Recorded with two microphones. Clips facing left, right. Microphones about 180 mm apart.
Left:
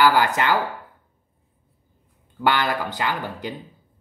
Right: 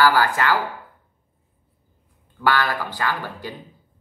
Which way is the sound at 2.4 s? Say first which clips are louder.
Even; 20° left (ahead or behind).